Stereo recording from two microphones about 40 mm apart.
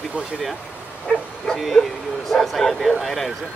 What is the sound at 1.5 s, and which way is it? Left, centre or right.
Speech, centre.